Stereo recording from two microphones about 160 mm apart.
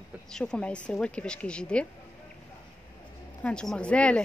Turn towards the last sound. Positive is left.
turn(degrees=5)  # may be behind; listen again after turning